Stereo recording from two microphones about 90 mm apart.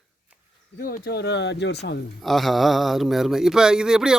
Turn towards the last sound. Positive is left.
turn(degrees=-5)  # may be behind; listen again after turning